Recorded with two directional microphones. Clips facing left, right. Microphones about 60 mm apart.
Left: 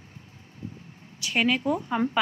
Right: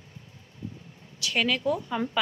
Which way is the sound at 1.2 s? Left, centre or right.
Left.